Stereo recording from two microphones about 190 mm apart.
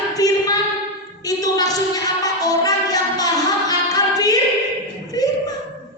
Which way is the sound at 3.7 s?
20° left (ahead or behind).